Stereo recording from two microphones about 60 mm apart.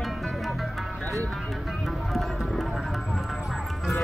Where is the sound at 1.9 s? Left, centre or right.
Centre.